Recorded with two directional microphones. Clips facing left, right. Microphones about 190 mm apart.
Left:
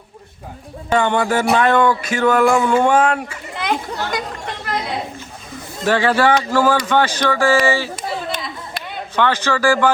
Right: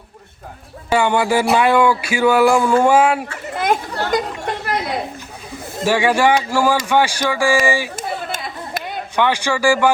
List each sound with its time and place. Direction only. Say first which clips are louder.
0.9 s speech: right 1 dB; 10° right (ahead or behind)
3.5 s a child's voice: right 3 dB; 45° right (ahead or behind)
5.8 s speech: even; 10° right (ahead or behind)
7.9 s a sound: left 1 dB; 45° right (ahead or behind)
9.1 s speech: even; 15° right (ahead or behind)